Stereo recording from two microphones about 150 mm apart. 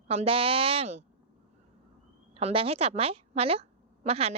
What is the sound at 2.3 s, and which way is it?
A woman's voice, 40° right (ahead or behind).